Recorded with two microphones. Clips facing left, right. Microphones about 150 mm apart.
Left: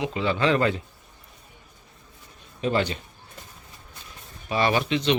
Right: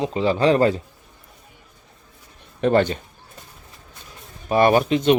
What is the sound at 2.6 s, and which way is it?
Speech, 55° right (ahead or behind).